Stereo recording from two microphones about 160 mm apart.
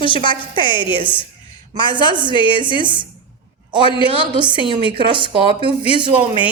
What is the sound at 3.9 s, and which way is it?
Speech, 35° left (ahead or behind).